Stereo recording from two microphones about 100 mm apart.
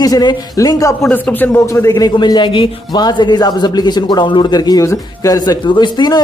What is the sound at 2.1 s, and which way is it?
Speech, 50° left (ahead or behind).